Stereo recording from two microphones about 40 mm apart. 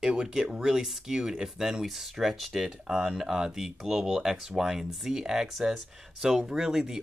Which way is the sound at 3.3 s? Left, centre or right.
Centre.